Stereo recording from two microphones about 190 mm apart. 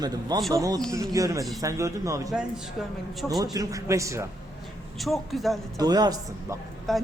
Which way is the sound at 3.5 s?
15° right (ahead or behind).